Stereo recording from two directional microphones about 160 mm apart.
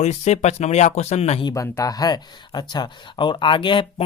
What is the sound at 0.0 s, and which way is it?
Speech, 45° left (ahead or behind).